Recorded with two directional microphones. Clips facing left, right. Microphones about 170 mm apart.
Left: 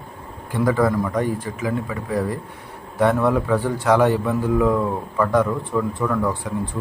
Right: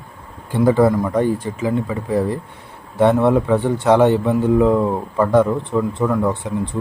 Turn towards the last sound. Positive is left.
turn(degrees=-20)  # may be behind; listen again after turning